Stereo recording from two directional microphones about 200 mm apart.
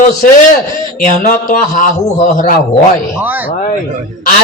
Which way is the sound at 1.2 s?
40° left (ahead or behind).